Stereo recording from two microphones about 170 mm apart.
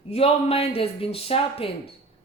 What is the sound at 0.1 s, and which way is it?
Speech, 35° left (ahead or behind).